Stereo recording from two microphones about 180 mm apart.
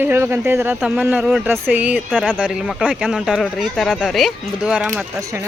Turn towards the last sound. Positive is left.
turn(degrees=-5)  # may be behind; listen again after turning